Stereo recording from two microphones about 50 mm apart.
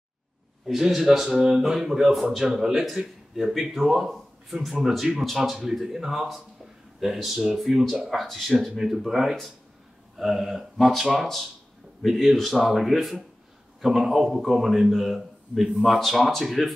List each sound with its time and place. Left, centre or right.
0.7 s a man's voice: centre